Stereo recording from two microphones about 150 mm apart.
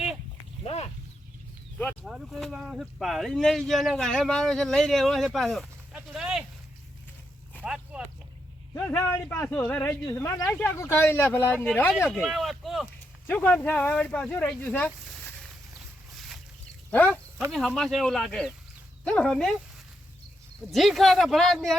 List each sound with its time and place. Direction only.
0.6 s a sound: 45° left (ahead or behind)
2.0 s speech: centre (ahead or behind)
7.6 s a sound: 5° right (ahead or behind)
8.7 s speech: 20° left (ahead or behind)
12.2 s speech: centre (ahead or behind)
13.2 s speech: 10° left (ahead or behind)
15.0 s a sound: 5° left (ahead or behind)
16.9 s speech: 10° left (ahead or behind)
20.7 s speech: centre (ahead or behind)